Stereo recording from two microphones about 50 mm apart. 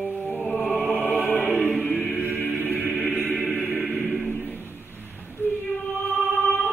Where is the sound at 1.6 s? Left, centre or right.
Centre.